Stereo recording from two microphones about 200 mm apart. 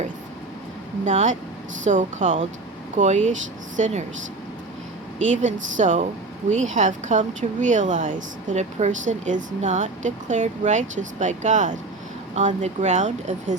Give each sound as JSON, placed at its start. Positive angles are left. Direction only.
{"t": 1.0, "sound": "speech", "side_deg": -35}
{"t": 5.5, "sound": "speech", "side_deg": -70}
{"t": 5.7, "sound": "speech", "side_deg": -35}